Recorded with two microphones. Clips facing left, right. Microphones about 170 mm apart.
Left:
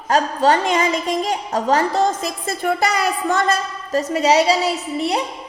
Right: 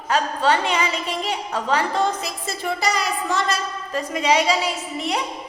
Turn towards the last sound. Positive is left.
turn(degrees=35)  # may be behind; listen again after turning